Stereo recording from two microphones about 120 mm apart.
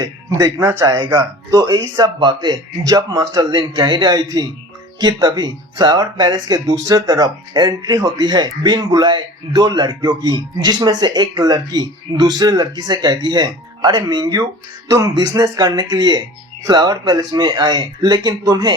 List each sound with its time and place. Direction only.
0.0 s speech: 35° right (ahead or behind)